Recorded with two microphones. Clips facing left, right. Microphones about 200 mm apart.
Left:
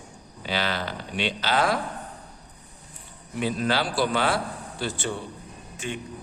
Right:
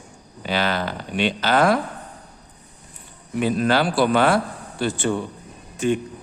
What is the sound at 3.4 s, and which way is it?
A man's voice, 55° right (ahead or behind).